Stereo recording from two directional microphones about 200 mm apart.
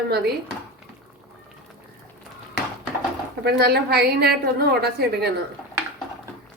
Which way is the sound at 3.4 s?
55° right (ahead or behind).